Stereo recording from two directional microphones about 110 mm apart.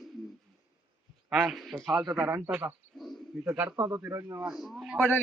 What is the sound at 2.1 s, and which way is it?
Speech, 15° right (ahead or behind).